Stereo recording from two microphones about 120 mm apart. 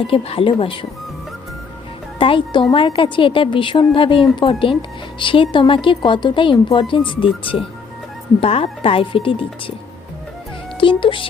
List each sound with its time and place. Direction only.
0.0 s a woman's voice: 50° left (ahead or behind)
2.1 s a woman's voice: 45° left (ahead or behind)
10.8 s speech: 45° left (ahead or behind)